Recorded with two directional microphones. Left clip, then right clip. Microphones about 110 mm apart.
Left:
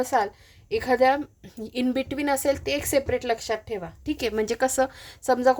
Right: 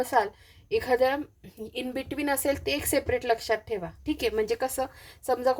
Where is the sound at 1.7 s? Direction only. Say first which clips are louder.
Left 6 dB; 40° left (ahead or behind).